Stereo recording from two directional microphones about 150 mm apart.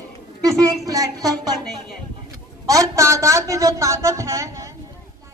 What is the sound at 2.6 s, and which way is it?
A woman's voice, 20° right (ahead or behind).